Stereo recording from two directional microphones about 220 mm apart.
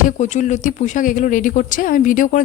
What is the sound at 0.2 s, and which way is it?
Speech, 35° left (ahead or behind).